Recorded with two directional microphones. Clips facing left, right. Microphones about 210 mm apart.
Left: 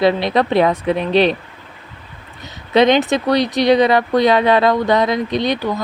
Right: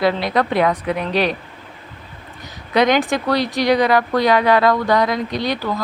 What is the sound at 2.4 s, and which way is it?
Speech, 25° left (ahead or behind).